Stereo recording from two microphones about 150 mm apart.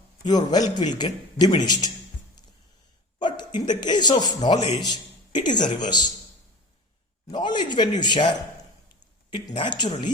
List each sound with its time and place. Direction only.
0.3 s speech: 25° left (ahead or behind)
3.2 s speech: 30° left (ahead or behind)
7.3 s speech: 30° left (ahead or behind)
9.5 s speech: 30° left (ahead or behind)